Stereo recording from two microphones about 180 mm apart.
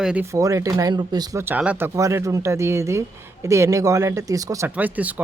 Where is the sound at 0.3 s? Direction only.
20° right (ahead or behind).